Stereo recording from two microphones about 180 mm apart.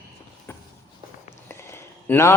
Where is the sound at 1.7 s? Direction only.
15° left (ahead or behind).